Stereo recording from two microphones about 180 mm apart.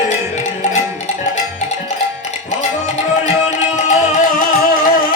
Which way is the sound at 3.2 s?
40° left (ahead or behind).